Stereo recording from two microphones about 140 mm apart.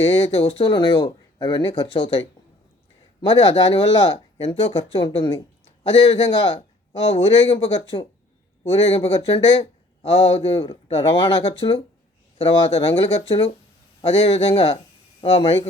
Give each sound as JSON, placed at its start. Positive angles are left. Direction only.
{"t": 0.3, "sound": "speech", "side_deg": 45}